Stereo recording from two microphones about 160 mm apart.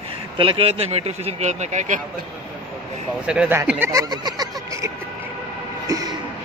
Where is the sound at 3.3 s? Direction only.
10° right (ahead or behind).